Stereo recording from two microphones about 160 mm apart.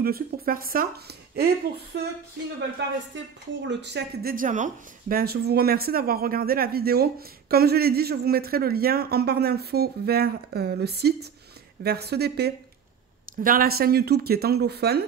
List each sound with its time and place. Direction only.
0.0 s a woman's voice: 70° right (ahead or behind); by 2.1 s 90° right
3.8 s a woman's voice: 80° right
13.4 s speech: 65° right (ahead or behind); by 15.0 s 90° right